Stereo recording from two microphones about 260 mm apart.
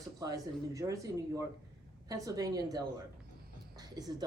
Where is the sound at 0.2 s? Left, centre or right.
Centre.